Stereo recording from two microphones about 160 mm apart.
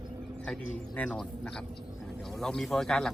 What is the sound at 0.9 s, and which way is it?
Speech, 10° left (ahead or behind).